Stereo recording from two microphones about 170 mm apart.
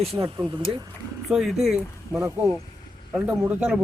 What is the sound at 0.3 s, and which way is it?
Speech, 30° right (ahead or behind).